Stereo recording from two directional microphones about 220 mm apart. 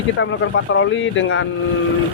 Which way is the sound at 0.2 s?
60° left (ahead or behind).